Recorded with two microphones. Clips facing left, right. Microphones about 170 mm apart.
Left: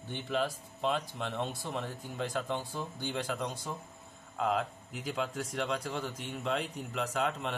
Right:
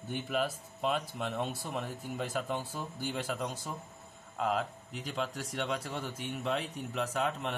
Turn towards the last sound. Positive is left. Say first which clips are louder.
# even
turn(degrees=0)  # may be behind; listen again after turning